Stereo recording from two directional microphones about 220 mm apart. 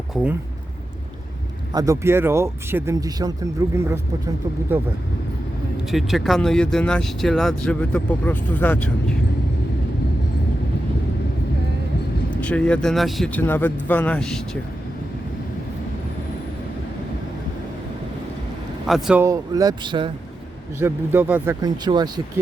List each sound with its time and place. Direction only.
0.1 s speech: 5° right (ahead or behind)
1.7 s speech: 15° right (ahead or behind)
5.9 s speech: centre (ahead or behind)
12.3 s speech: 5° left (ahead or behind)
18.9 s speech: centre (ahead or behind)
19.2 s speech: 15° right (ahead or behind)
20.7 s speech: 10° right (ahead or behind)